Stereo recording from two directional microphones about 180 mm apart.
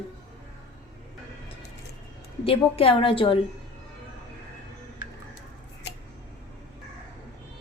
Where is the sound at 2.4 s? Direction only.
30° left (ahead or behind).